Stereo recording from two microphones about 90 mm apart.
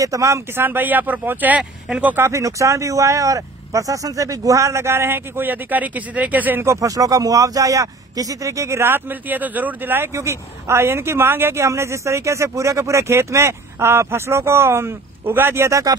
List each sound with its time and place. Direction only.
0.0 s speech: 35° right (ahead or behind); by 2.2 s 15° right (ahead or behind)
2.2 s speech: 35° right (ahead or behind); by 6.6 s 20° right (ahead or behind)
6.6 s speech: 35° right (ahead or behind); by 10.0 s 20° right (ahead or behind)
10.1 s speech: 30° right (ahead or behind)